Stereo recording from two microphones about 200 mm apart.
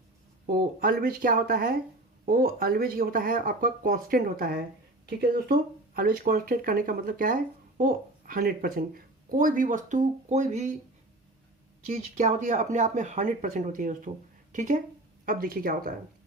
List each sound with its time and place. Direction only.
0.4 s speech: 45° right (ahead or behind)
12.1 s speech: 40° right (ahead or behind)